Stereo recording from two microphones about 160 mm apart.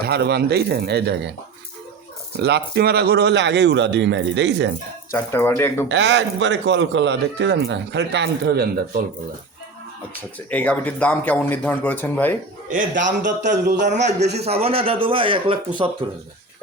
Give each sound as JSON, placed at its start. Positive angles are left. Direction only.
{"t": 0.0, "sound": "a man's voice", "side_deg": -90}
{"t": 2.4, "sound": "a man's voice", "side_deg": -90}
{"t": 5.1, "sound": "speech", "side_deg": 15}
{"t": 5.9, "sound": "a man's voice", "side_deg": -90}
{"t": 10.3, "sound": "speech", "side_deg": 10}
{"t": 12.6, "sound": "a man's voice", "side_deg": -55}